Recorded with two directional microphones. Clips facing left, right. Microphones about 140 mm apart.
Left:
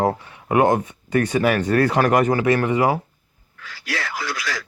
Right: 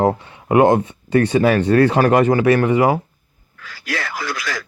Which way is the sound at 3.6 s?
45° right (ahead or behind).